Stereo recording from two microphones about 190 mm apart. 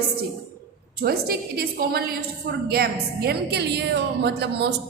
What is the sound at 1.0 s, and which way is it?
A woman's voice, 55° right (ahead or behind).